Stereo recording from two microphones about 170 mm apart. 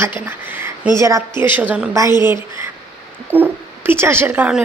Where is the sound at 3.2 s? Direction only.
10° right (ahead or behind).